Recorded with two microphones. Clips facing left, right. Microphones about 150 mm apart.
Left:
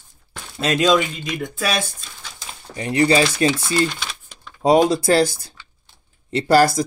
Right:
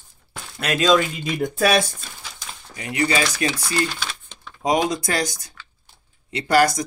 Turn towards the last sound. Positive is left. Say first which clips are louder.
# left 3 dB
turn(degrees=30)  # may be behind; listen again after turning